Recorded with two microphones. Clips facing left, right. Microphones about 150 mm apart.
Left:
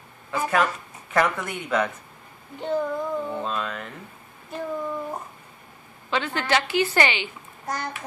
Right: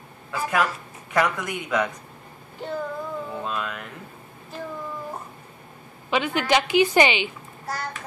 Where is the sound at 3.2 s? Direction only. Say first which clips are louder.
Left 1 dB; 5° right (ahead or behind).